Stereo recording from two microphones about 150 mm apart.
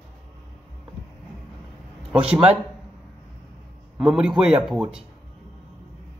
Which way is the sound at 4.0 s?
5° right (ahead or behind).